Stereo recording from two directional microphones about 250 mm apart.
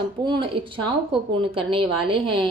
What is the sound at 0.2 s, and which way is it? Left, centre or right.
A woman's voice, centre.